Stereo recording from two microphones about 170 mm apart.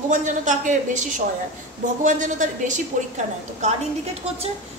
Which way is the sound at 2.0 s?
50° right (ahead or behind).